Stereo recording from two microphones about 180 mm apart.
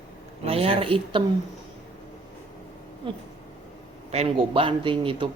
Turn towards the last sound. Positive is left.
turn(degrees=-25)  # may be behind; listen again after turning